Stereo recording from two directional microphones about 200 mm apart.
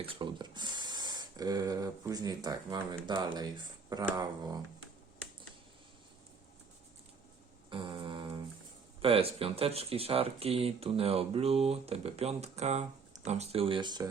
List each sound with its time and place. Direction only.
0.0 s speech: 25° right (ahead or behind)
7.7 s music: 25° right (ahead or behind)
9.0 s speech: 30° right (ahead or behind)